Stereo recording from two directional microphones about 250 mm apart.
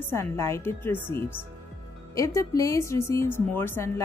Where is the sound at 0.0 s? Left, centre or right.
Centre.